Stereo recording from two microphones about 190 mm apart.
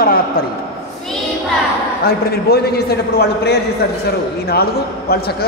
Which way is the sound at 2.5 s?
55° left (ahead or behind).